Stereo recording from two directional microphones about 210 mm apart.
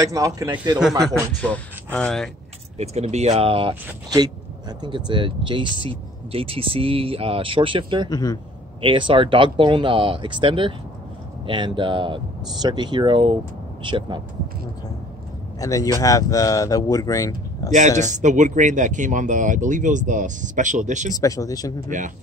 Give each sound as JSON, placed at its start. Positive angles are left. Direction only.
{"t": 0.0, "sound": "a man's voice", "side_deg": -15}
{"t": 1.0, "sound": "speech", "side_deg": 5}
{"t": 2.8, "sound": "speech", "side_deg": -30}
{"t": 8.1, "sound": "speech", "side_deg": 20}
{"t": 8.8, "sound": "speech", "side_deg": -25}
{"t": 15.6, "sound": "speech", "side_deg": 15}
{"t": 17.7, "sound": "speech", "side_deg": -35}
{"t": 21.1, "sound": "speech", "side_deg": 15}